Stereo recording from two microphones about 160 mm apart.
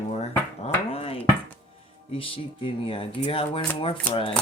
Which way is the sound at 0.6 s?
35° left (ahead or behind).